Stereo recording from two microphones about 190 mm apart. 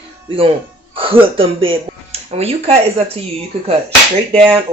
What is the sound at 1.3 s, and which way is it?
Speech, 30° right (ahead or behind).